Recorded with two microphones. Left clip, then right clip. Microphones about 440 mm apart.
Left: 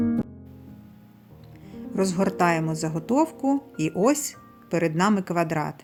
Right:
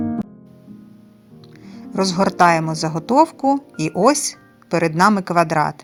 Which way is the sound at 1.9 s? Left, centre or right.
Centre.